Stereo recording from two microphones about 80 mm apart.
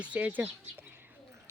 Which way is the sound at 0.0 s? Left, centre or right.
Centre.